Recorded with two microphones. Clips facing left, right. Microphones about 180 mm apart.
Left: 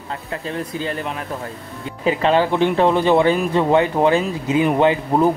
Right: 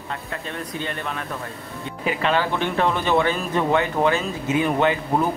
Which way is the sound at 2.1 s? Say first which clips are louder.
Left 6 dB; 30° left (ahead or behind).